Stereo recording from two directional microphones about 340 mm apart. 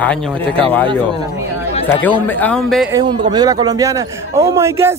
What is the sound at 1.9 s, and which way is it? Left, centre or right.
A man's voice, centre.